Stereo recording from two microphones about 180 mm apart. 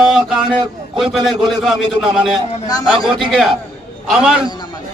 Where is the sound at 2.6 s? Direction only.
20° left (ahead or behind).